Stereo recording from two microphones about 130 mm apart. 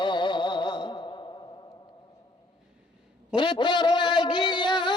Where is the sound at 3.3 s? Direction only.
40° left (ahead or behind).